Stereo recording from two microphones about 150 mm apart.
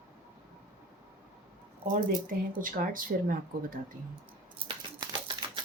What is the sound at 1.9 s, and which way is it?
A woman's voice, 65° right (ahead or behind).